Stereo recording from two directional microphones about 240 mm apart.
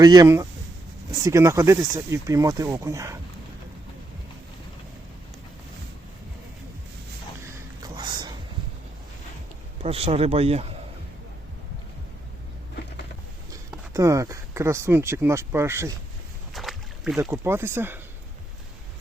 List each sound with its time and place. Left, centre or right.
0.0 s speech: centre
7.8 s a sound: centre
9.8 s speech: right
13.5 s speech: centre
16.6 s boat: centre
17.2 s speech: centre